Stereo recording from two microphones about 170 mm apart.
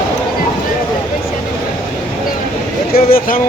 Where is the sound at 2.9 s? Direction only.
60° left (ahead or behind).